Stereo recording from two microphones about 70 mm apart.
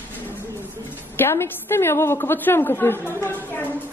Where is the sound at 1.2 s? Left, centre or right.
Left.